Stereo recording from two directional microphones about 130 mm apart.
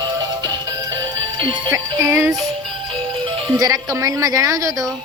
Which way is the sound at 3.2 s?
30° right (ahead or behind).